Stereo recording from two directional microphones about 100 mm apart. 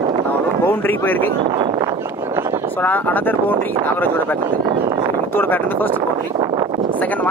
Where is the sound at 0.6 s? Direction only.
20° left (ahead or behind).